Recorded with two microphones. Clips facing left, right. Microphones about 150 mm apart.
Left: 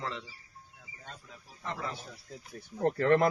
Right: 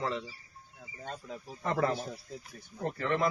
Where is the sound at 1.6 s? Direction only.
60° right (ahead or behind).